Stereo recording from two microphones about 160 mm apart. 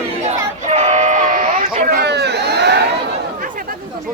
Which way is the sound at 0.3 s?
40° right (ahead or behind).